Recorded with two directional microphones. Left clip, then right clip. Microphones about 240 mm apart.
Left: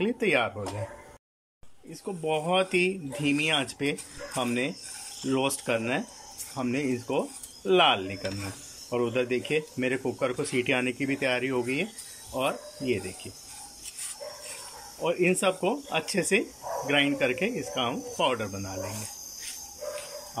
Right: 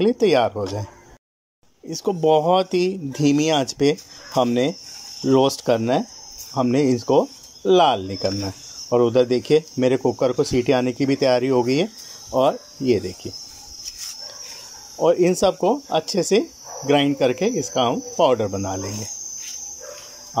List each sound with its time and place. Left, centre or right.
0.0 s speech: centre
1.9 s speech: right
15.0 s speech: right